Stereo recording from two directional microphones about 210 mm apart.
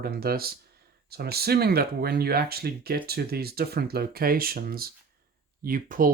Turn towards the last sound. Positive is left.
turn(degrees=-40)  # may be behind; listen again after turning